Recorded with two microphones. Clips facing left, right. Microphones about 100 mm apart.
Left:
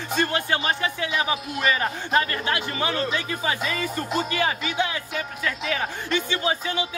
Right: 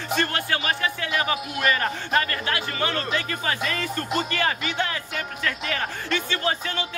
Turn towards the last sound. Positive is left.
turn(degrees=10)  # may be behind; listen again after turning